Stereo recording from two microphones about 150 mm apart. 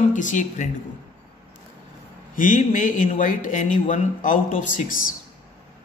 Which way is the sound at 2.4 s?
60° left (ahead or behind).